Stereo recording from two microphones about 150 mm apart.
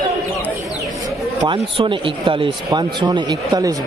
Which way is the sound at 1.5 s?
35° right (ahead or behind).